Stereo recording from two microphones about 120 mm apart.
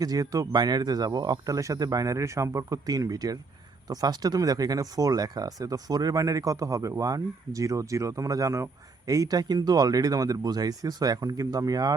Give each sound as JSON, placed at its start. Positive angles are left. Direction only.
{"t": 0.0, "sound": "speech", "side_deg": -30}